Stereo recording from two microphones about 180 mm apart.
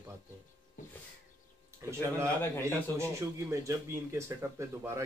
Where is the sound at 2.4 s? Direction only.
10° left (ahead or behind).